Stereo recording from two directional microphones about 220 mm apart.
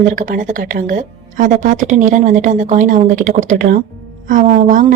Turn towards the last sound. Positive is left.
turn(degrees=-35)  # may be behind; listen again after turning